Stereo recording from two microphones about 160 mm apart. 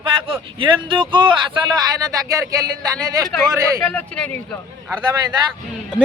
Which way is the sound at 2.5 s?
25° right (ahead or behind).